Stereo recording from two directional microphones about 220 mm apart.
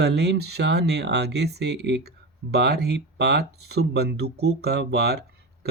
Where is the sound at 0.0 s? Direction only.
50° right (ahead or behind).